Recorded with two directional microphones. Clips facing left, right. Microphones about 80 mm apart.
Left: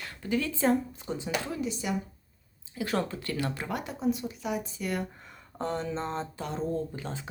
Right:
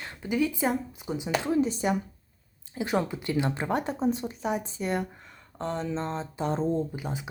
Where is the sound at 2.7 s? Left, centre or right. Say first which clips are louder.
Right 3 dB; centre.